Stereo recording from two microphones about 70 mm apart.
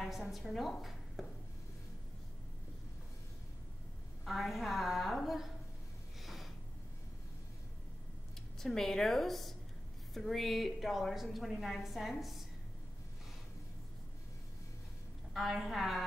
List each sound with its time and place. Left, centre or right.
0.3 s speech: centre
4.2 s a woman's voice: centre
6.2 s a sound: centre
8.5 s a woman's voice: centre
15.3 s a woman's voice: centre